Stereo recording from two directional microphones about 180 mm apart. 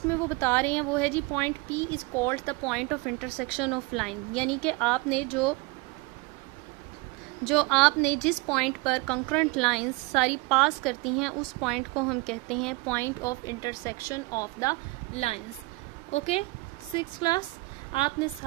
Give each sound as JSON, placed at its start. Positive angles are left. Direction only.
{"t": 0.1, "sound": "a woman's voice", "side_deg": 15}
{"t": 7.4, "sound": "a woman's voice", "side_deg": 0}
{"t": 16.1, "sound": "a woman's voice", "side_deg": 35}
{"t": 16.9, "sound": "speech", "side_deg": 25}